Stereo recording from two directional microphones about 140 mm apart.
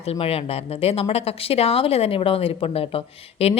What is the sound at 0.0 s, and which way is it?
A woman's voice, 45° left (ahead or behind).